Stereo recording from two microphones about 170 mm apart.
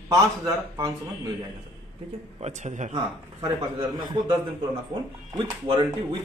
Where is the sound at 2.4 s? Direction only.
45° right (ahead or behind).